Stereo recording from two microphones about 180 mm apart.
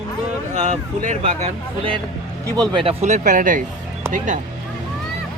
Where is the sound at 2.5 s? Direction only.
25° right (ahead or behind); by 4.4 s 45° right (ahead or behind).